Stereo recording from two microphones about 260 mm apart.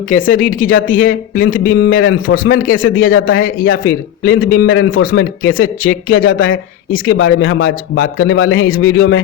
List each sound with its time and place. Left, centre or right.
0.3 s a woman's voice: left
1.0 s speech: left